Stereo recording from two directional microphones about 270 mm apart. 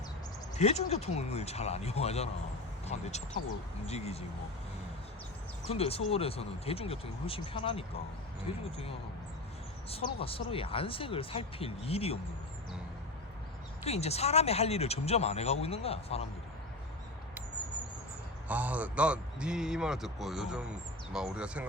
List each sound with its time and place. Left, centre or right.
0.5 s speech: left
5.6 s speech: left
13.8 s speech: left
18.4 s a man's voice: centre